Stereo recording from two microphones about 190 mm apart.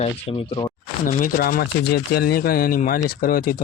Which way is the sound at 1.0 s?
45° left (ahead or behind).